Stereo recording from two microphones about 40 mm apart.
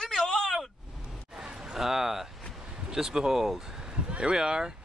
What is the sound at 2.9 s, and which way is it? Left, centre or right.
Speech, centre.